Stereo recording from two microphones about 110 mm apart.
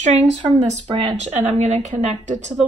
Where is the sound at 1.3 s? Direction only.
90° right.